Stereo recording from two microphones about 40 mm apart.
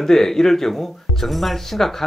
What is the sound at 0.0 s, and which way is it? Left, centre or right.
Speech, centre.